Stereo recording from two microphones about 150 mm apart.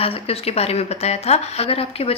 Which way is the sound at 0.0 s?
40° left (ahead or behind).